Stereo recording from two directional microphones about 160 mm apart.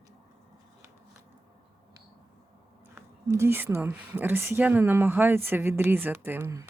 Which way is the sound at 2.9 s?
15° right (ahead or behind).